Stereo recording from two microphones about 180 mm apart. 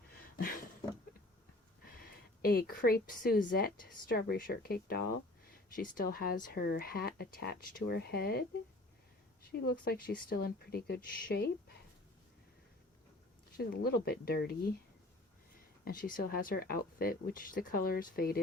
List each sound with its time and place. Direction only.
2.4 s speech: 55° left (ahead or behind)
9.5 s speech: 55° left (ahead or behind)
13.6 s speech: 60° left (ahead or behind)
15.8 s speech: 50° left (ahead or behind)